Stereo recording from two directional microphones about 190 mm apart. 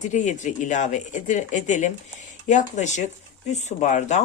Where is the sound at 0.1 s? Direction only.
40° left (ahead or behind).